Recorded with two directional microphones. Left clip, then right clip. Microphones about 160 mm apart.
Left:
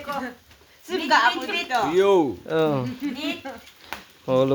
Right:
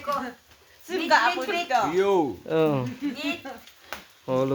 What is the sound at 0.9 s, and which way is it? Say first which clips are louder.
Speech: left 2 dB; 5° right (ahead or behind).